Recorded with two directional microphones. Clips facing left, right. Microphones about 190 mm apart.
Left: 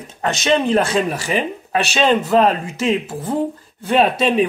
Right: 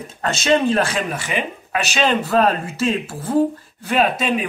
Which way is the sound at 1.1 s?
35° left (ahead or behind).